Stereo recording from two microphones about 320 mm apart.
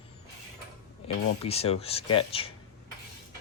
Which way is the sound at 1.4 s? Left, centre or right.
Centre.